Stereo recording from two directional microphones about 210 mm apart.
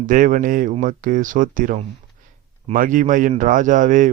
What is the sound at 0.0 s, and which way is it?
Speech, 40° right (ahead or behind).